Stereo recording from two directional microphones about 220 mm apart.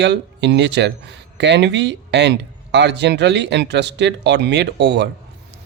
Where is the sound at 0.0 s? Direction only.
50° right (ahead or behind).